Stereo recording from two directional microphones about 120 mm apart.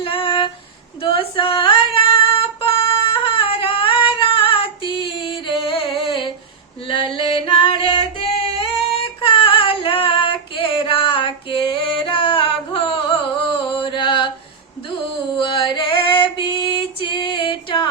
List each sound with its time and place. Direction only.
0.0 s a sound: 50° left (ahead or behind)
1.0 s female singing: 45° left (ahead or behind)
6.8 s singing: 45° left (ahead or behind)
9.2 s female singing: 45° left (ahead or behind)
15.4 s female singing: 45° left (ahead or behind)